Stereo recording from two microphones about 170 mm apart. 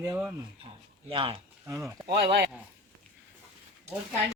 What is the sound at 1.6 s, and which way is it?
Speech, 20° right (ahead or behind).